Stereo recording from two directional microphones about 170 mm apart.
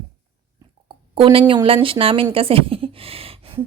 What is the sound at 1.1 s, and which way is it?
A woman's voice, 30° right (ahead or behind).